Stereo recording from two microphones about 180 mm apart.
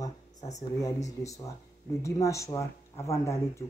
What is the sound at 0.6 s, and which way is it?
Speech, 20° left (ahead or behind).